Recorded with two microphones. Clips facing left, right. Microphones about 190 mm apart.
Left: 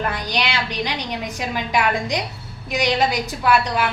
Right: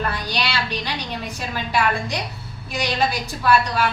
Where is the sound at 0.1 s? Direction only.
15° left (ahead or behind).